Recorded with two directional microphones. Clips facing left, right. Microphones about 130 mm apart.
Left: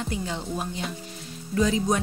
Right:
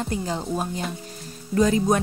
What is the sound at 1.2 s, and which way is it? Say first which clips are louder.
Music: right 4 dB; 45° right (ahead or behind).